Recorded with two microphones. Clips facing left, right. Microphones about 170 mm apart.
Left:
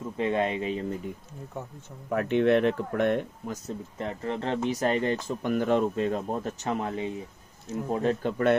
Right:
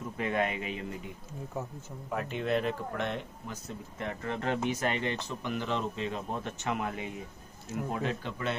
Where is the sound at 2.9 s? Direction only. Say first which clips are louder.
Left 9 dB; 55° left (ahead or behind).